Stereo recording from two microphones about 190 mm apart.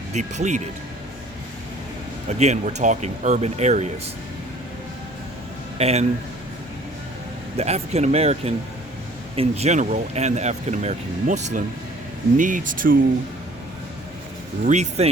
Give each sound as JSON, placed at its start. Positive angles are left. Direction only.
{"t": 0.1, "sound": "speech", "side_deg": -40}
{"t": 2.4, "sound": "speech", "side_deg": -35}
{"t": 5.7, "sound": "a man's voice", "side_deg": -35}
{"t": 7.5, "sound": "speech", "side_deg": -35}
{"t": 14.6, "sound": "speech", "side_deg": -40}